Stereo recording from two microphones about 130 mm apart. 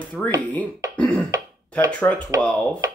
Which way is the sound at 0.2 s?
5° left (ahead or behind).